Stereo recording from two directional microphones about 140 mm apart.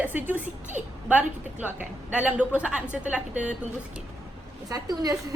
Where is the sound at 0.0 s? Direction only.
10° right (ahead or behind).